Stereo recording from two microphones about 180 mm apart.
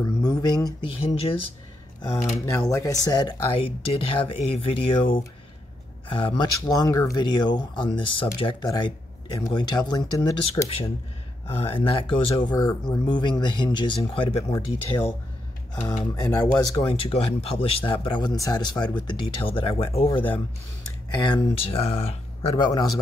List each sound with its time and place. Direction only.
0.0 s speech: 20° left (ahead or behind)
0.8 s speech: 30° left (ahead or behind)
2.7 s speech: 20° left (ahead or behind)
16.2 s speech: 20° left (ahead or behind)
21.3 s speech: 30° left (ahead or behind)
22.6 s speech: 20° left (ahead or behind)